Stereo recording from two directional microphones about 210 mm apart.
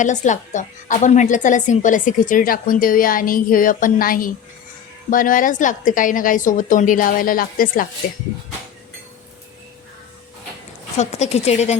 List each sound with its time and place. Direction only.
0.0 s a woman's voice: 35° left (ahead or behind)
10.9 s a woman's voice: 30° left (ahead or behind)